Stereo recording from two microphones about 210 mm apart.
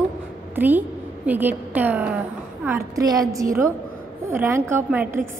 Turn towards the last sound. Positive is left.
turn(degrees=-10)  # may be behind; listen again after turning